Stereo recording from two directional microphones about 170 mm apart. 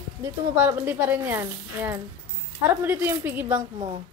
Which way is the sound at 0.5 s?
10° right (ahead or behind).